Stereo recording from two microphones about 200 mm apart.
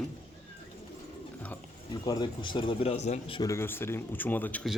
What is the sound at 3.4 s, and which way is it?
Speech, 15° left (ahead or behind).